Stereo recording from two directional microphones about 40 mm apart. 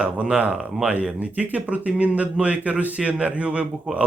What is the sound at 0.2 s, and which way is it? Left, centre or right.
A man's voice, right.